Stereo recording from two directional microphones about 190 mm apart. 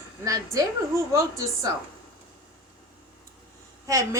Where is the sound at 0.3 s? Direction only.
15° right (ahead or behind).